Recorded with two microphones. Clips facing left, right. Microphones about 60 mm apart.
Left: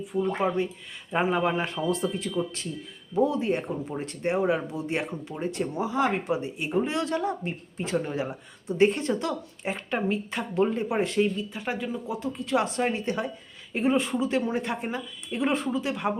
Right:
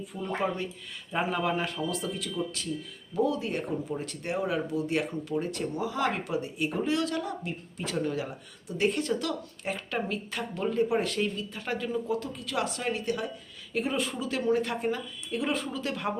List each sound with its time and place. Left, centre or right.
0.0 s speech: left